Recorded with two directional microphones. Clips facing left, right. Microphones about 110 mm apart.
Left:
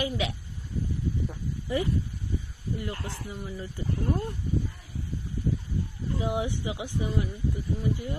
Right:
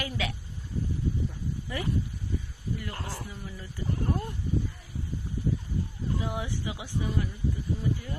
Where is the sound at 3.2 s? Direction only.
25° left (ahead or behind).